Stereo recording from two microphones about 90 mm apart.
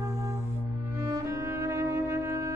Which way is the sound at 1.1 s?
35° right (ahead or behind).